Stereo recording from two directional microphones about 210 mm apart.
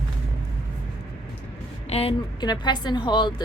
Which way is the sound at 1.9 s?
25° left (ahead or behind).